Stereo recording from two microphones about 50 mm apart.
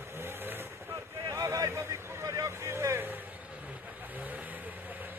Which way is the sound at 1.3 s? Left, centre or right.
Right.